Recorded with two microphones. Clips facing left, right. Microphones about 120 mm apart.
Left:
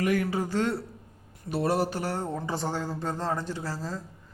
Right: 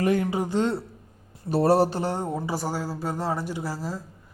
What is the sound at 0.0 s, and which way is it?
Speech, 25° right (ahead or behind).